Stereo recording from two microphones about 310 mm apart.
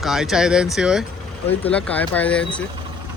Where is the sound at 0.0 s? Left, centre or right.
Centre.